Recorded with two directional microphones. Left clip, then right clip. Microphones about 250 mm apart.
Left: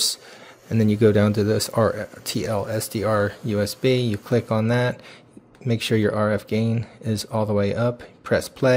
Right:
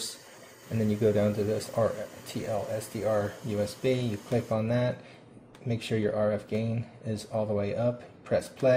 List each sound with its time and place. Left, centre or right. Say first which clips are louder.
0.7 s speech: left 8 dB; left